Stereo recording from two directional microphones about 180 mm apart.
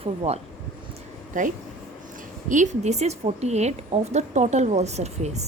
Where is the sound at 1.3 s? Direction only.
45° right (ahead or behind).